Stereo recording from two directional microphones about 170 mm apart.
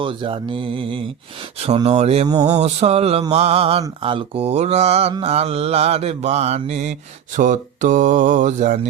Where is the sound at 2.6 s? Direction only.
40° right (ahead or behind).